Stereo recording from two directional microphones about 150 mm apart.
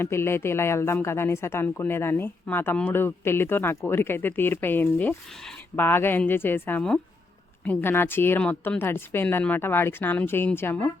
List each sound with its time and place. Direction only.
0.0 s speech: 15° left (ahead or behind)